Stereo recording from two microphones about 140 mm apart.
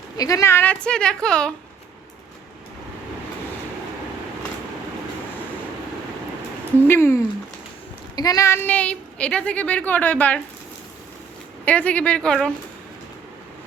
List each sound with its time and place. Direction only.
0.2 s a woman's voice: 25° left (ahead or behind); by 1.5 s 5° left (ahead or behind)
6.7 s a woman's voice: 15° left (ahead or behind)
11.6 s a woman's voice: 10° left (ahead or behind)